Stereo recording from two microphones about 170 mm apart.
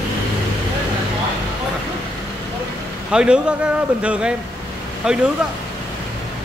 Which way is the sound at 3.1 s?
5° right (ahead or behind).